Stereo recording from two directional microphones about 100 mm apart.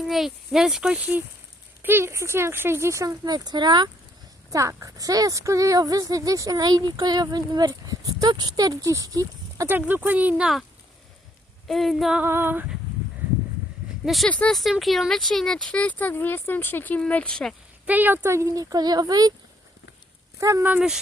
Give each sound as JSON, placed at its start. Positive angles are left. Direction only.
{"t": 0.0, "sound": "a child's voice", "side_deg": -5}
{"t": 3.2, "sound": "speech", "side_deg": -45}
{"t": 4.5, "sound": "a woman's voice", "side_deg": -30}
{"t": 9.6, "sound": "speech", "side_deg": -20}
{"t": 11.7, "sound": "speech", "side_deg": 0}
{"t": 12.2, "sound": "a child's voice", "side_deg": -20}
{"t": 14.0, "sound": "speech", "side_deg": 0}
{"t": 14.3, "sound": "speech", "side_deg": 15}
{"t": 14.5, "sound": "speech", "side_deg": 0}
{"t": 17.8, "sound": "a woman's voice", "side_deg": -15}
{"t": 20.4, "sound": "a woman's voice", "side_deg": -30}
{"t": 20.7, "sound": "speech", "side_deg": -10}